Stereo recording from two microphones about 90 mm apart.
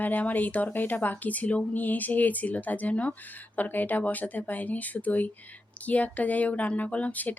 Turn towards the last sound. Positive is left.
turn(degrees=20)  # may be behind; listen again after turning